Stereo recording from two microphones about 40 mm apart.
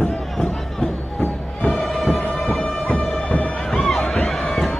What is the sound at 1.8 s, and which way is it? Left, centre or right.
Music, centre.